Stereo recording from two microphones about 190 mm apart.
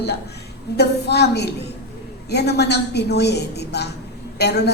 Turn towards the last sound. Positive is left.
turn(degrees=60)  # may be behind; listen again after turning